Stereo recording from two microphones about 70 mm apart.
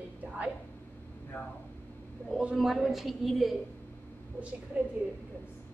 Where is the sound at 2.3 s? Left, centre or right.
Centre.